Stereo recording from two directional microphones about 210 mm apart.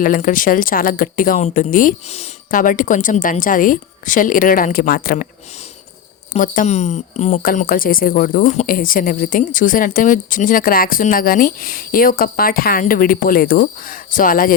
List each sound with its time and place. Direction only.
0.0 s a woman's voice: 40° left (ahead or behind)
6.3 s a woman's voice: 40° left (ahead or behind)